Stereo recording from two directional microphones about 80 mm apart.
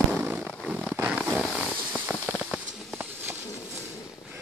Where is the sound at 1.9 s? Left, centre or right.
Centre.